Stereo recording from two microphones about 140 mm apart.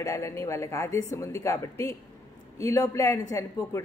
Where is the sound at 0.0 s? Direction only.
20° left (ahead or behind).